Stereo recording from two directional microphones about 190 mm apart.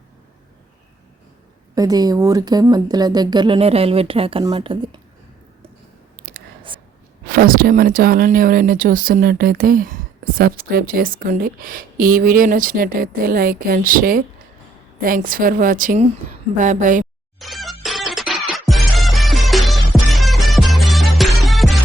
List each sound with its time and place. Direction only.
1.7 s a woman's voice: 20° right (ahead or behind)
6.2 s a sound: 50° right (ahead or behind)
7.3 s speech: 50° right (ahead or behind)
17.4 s music: centre (ahead or behind)